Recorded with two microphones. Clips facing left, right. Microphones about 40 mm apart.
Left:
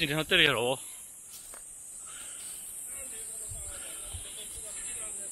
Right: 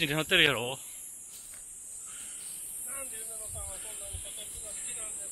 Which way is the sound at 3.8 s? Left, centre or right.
Left.